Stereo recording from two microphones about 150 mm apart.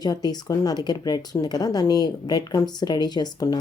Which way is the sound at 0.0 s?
25° left (ahead or behind).